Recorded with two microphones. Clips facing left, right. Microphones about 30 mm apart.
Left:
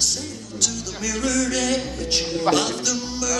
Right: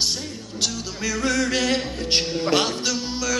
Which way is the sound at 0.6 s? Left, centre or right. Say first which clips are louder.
Even; right.